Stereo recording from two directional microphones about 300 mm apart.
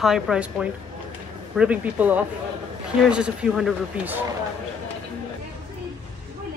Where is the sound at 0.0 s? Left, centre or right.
Centre.